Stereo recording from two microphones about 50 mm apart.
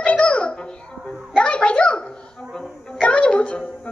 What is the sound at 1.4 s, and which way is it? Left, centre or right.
A child's voice, left.